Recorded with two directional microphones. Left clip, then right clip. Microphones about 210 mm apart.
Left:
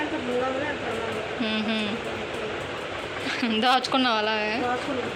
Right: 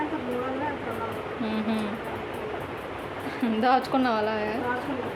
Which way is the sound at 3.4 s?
Centre (ahead or behind).